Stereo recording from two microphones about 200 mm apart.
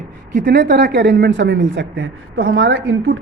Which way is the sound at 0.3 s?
50° right (ahead or behind).